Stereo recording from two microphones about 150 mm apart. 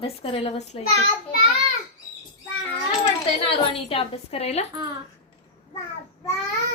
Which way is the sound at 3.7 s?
40° left (ahead or behind).